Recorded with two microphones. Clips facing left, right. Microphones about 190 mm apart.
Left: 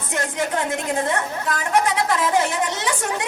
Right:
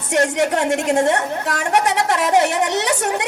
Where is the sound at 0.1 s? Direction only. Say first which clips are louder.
Right 7 dB; 80° right.